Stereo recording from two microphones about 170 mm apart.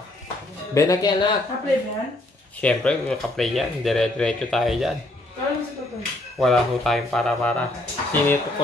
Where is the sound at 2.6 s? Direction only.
5° left (ahead or behind).